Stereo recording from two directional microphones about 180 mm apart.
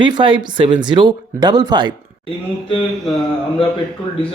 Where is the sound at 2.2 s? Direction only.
30° left (ahead or behind).